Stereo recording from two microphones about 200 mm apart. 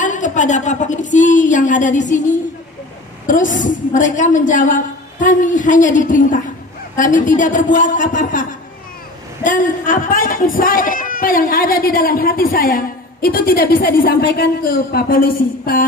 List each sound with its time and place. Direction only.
0.0 s a woman's voice: 40° left (ahead or behind)